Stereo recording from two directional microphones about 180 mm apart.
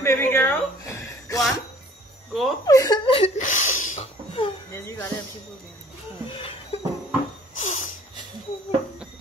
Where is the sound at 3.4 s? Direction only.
45° left (ahead or behind).